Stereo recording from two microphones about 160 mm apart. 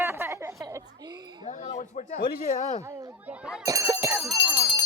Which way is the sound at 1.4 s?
45° left (ahead or behind).